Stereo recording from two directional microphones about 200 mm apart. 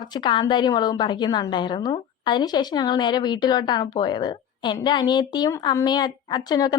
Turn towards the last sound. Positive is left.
turn(degrees=20)  # may be behind; listen again after turning